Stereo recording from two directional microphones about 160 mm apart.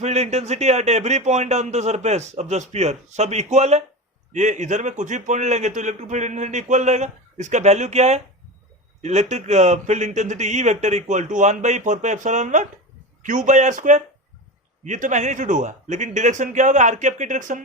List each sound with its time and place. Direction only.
0.0 s a man's voice: 45° right (ahead or behind)